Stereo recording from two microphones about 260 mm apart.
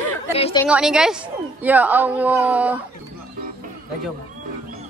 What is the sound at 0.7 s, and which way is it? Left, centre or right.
Speech, centre.